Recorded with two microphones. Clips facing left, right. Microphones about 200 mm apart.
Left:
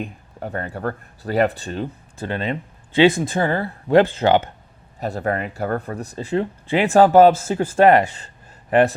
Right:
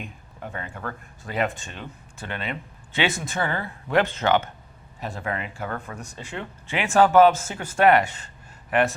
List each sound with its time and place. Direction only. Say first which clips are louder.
0.0 s speech: left 7 dB; 40° left (ahead or behind)